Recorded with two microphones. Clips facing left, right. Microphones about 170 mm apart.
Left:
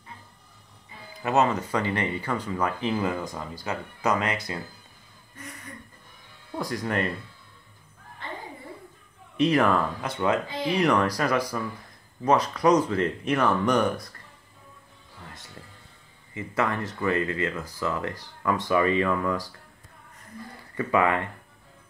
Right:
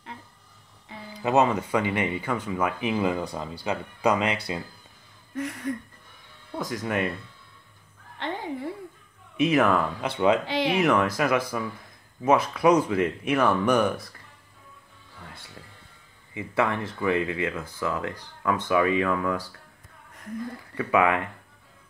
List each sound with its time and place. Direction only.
1.2 s speech: 15° right (ahead or behind)
5.3 s a sound: 80° right
6.6 s speech: centre (ahead or behind)
8.2 s a sound: 85° right
9.4 s speech: 5° right (ahead or behind)
10.4 s speech: 80° right
10.8 s speech: 5° right (ahead or behind)
15.2 s speech: 10° right (ahead or behind)
20.7 s speech: 10° right (ahead or behind)